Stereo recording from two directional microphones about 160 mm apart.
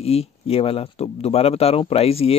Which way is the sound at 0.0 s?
40° left (ahead or behind).